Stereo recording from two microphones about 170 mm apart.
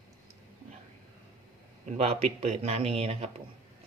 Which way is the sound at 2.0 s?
40° right (ahead or behind).